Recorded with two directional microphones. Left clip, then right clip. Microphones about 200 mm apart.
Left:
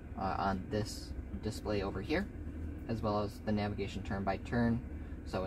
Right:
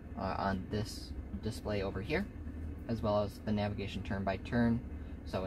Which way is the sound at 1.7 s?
25° right (ahead or behind).